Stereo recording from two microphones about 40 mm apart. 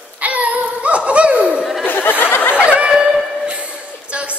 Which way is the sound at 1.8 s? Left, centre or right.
Left.